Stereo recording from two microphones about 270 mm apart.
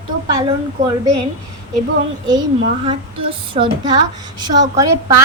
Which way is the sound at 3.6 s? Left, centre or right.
Right.